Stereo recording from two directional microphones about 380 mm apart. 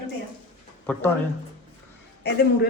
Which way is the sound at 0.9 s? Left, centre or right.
Centre.